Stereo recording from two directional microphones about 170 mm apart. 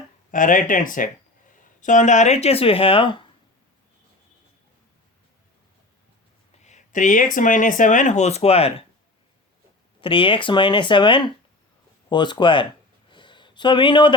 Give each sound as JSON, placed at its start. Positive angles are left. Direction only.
{"t": 0.3, "sound": "speech", "side_deg": 50}
{"t": 6.6, "sound": "speech", "side_deg": 45}
{"t": 10.0, "sound": "speech", "side_deg": 30}
{"t": 13.1, "sound": "a sound", "side_deg": 30}